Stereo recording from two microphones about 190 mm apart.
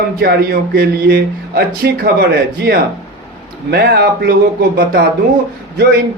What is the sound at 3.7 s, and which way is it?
Speech, 60° right (ahead or behind).